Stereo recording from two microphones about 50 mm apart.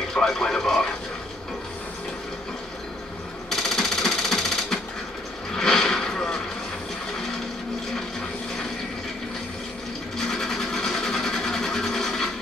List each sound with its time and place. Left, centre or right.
0.1 s speech: centre
3.4 s jackhammer: centre
5.5 s a sound: centre
10.1 s sewing machine: centre